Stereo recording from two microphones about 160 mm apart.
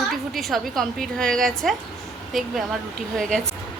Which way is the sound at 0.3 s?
Centre (ahead or behind).